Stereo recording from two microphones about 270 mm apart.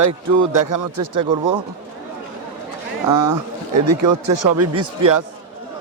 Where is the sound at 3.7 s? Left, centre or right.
Right.